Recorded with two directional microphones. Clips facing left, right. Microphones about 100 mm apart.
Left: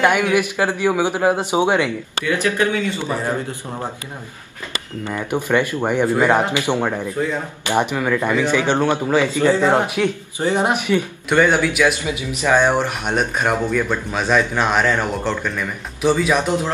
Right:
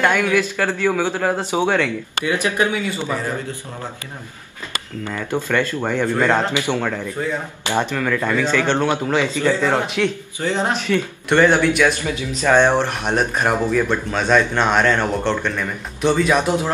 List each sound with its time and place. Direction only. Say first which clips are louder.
0.0 s a man's voice: left 1 dB; 15° left (ahead or behind)
2.2 s speech: left 1 dB; 20° right (ahead or behind)
5.0 s a man's voice: left 1 dB; 15° left (ahead or behind)
9.2 s a man's voice: left 3 dB; 15° left (ahead or behind)
11.2 s speech: right 2 dB; centre (ahead or behind)
12.0 s speech: even; 15° left (ahead or behind)